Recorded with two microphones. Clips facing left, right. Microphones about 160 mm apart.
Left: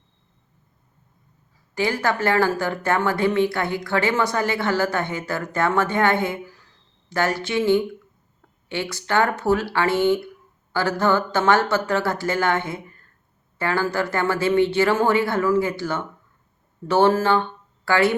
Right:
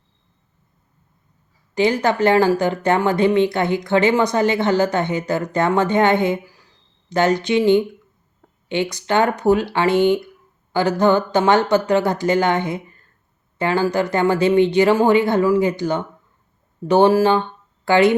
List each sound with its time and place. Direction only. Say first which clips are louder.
1.7 s a woman's voice: right 5 dB; 20° right (ahead or behind)